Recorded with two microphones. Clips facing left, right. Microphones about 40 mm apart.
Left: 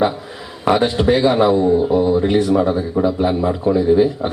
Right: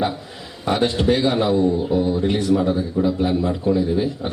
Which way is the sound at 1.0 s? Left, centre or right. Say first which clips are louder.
Left 6 dB; centre.